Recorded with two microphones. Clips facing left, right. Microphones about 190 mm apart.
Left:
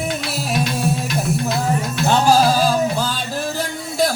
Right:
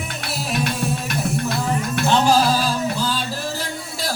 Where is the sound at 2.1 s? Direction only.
45° left (ahead or behind).